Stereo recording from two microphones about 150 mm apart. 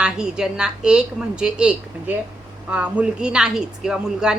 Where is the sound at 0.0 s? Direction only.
5° right (ahead or behind).